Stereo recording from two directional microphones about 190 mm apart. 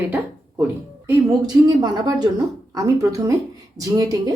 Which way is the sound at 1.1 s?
20° right (ahead or behind).